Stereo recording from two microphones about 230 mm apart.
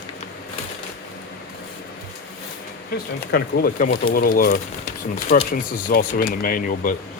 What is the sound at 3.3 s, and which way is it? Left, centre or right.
Speech, left.